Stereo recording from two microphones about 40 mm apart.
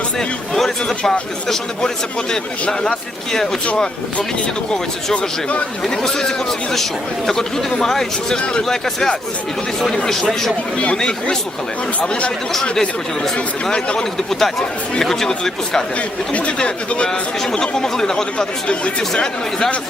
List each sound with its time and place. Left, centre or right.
0.2 s speech: centre
2.3 s speech: left
5.1 s speech: left
5.9 s speech: centre
10.2 s speech: centre
11.9 s speech: left
12.7 s speech: centre
13.3 s speech: left
14.3 s speech: centre
16.0 s speech: left
17.1 s speech: centre